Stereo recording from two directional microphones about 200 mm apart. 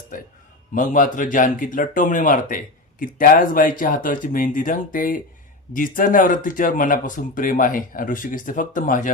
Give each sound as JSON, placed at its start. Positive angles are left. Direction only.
{"t": 0.1, "sound": "speech", "side_deg": 40}